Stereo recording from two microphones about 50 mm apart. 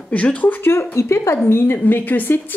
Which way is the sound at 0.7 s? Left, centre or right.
Left.